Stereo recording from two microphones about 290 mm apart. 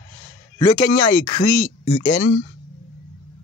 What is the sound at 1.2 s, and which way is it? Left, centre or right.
Speech, left.